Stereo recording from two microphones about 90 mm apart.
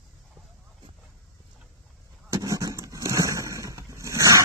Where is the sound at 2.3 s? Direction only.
40° right (ahead or behind).